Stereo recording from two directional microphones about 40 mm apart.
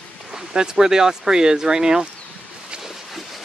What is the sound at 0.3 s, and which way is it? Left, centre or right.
Speech, centre.